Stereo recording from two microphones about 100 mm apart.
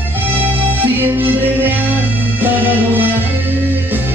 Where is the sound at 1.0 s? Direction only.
20° right (ahead or behind).